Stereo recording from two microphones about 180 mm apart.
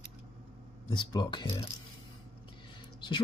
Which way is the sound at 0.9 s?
25° left (ahead or behind).